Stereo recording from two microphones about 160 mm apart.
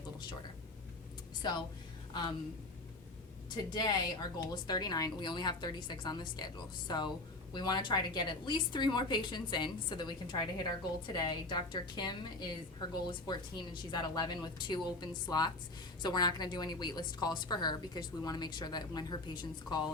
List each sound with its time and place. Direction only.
1.4 s speech: 25° left (ahead or behind)
3.5 s a woman's voice: 25° left (ahead or behind)